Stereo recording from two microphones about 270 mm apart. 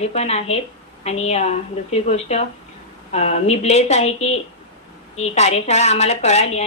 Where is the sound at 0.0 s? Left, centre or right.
Left.